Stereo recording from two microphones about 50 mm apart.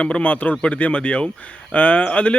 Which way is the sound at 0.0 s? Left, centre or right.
Left.